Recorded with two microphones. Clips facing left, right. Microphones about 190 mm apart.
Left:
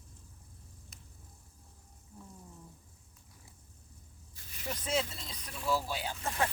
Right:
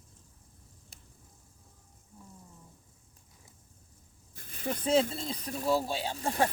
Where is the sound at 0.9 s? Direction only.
30° right (ahead or behind).